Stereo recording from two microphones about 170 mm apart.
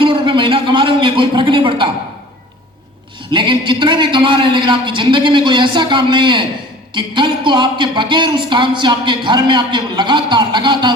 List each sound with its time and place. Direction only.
0.0 s a man's voice: 30° right (ahead or behind)
3.3 s speech: 30° right (ahead or behind)